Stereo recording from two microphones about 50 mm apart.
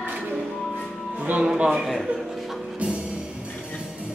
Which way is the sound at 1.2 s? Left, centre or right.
Right.